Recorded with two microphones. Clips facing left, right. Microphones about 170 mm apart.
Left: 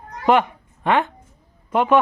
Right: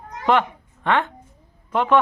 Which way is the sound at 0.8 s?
10° left (ahead or behind).